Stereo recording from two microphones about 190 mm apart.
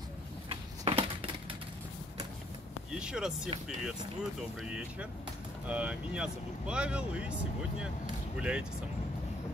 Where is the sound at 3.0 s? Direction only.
5° right (ahead or behind).